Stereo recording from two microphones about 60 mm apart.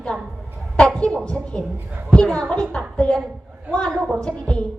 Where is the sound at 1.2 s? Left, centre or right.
Centre.